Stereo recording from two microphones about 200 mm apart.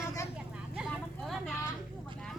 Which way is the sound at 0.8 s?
Centre (ahead or behind).